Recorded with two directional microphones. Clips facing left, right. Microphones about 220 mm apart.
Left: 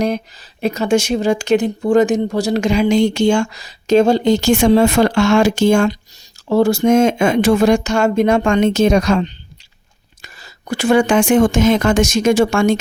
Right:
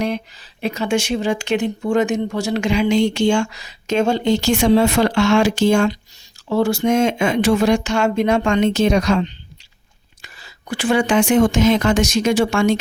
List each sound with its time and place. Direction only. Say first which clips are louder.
0.6 s speech: left 4 dB; 40° left (ahead or behind)